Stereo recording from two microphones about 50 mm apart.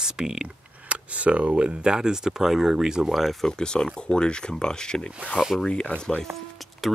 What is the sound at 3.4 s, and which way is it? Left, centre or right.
Speech, centre.